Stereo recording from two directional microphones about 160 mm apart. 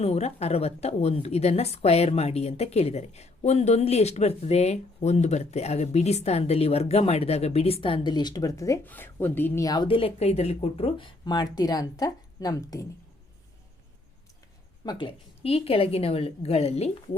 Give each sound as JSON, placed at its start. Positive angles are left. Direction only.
{"t": 0.0, "sound": "a woman's voice", "side_deg": 40}
{"t": 14.8, "sound": "a woman's voice", "side_deg": 30}